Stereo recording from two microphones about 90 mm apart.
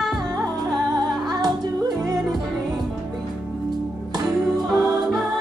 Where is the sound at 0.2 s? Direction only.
40° right (ahead or behind).